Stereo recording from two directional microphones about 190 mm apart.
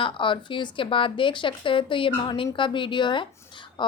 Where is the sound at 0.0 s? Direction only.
25° left (ahead or behind).